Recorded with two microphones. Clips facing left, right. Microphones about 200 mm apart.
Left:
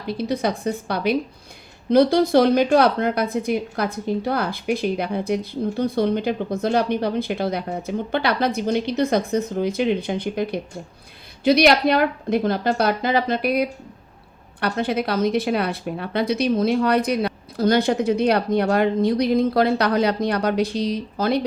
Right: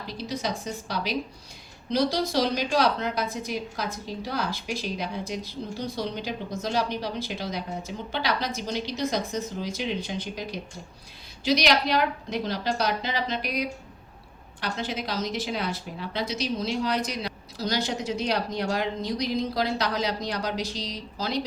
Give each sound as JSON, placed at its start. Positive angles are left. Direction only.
{"t": 0.1, "sound": "a woman's voice", "side_deg": 60}